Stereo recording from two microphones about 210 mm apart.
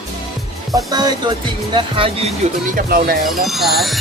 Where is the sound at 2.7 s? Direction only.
45° right (ahead or behind).